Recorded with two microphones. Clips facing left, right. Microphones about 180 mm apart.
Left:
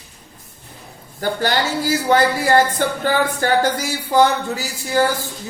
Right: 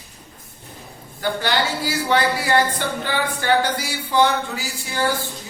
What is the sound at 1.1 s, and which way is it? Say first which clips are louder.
Speech: left 2 dB; 45° left (ahead or behind).